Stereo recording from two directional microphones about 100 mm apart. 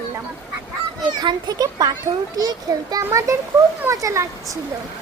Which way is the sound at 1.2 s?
45° right (ahead or behind).